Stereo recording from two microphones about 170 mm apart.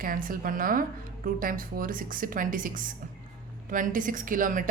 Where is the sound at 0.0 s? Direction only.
55° right (ahead or behind).